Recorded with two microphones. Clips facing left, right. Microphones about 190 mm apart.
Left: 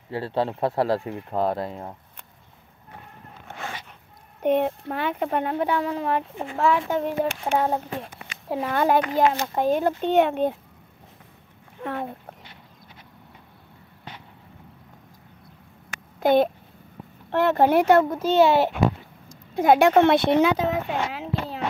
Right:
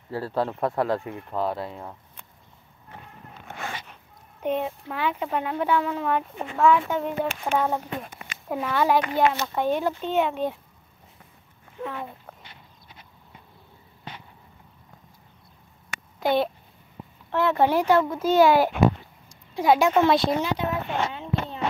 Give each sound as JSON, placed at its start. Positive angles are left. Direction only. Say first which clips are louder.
{"t": 0.1, "sound": "speech", "louder": "left 1 dB", "side_deg": 25}
{"t": 1.4, "sound": "speech", "louder": "left 3 dB", "side_deg": 45}
{"t": 4.4, "sound": "speech", "louder": "left 5 dB", "side_deg": 60}
{"t": 8.7, "sound": "speech", "louder": "left 1 dB", "side_deg": 50}
{"t": 9.8, "sound": "speech", "louder": "left 4 dB", "side_deg": 65}
{"t": 11.8, "sound": "speech", "louder": "left 3 dB", "side_deg": 55}
{"t": 16.2, "sound": "a child's voice", "louder": "left 4 dB", "side_deg": 50}
{"t": 18.0, "sound": "speech", "louder": "left 1 dB", "side_deg": 35}
{"t": 18.3, "sound": "speech", "louder": "even", "side_deg": 25}
{"t": 19.5, "sound": "speech", "louder": "left 3 dB", "side_deg": 50}